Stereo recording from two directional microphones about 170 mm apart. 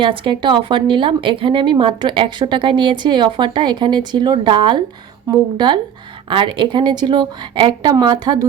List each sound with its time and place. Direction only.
0.0 s speech: 30° right (ahead or behind)